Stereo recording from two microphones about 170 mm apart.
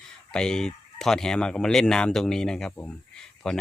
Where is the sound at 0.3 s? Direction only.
5° left (ahead or behind).